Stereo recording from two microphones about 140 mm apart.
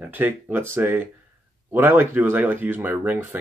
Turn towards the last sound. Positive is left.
turn(degrees=-15)  # may be behind; listen again after turning